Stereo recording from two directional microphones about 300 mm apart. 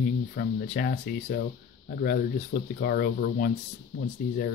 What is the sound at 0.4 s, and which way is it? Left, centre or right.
Speech, left.